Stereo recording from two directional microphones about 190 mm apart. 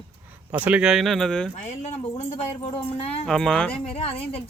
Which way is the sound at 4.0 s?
30° left (ahead or behind).